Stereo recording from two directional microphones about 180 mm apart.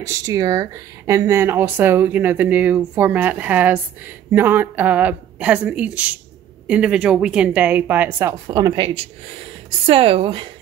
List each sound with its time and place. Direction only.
0.0 s a woman's voice: 15° right (ahead or behind)